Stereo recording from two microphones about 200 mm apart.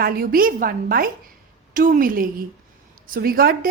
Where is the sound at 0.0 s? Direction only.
45° right (ahead or behind).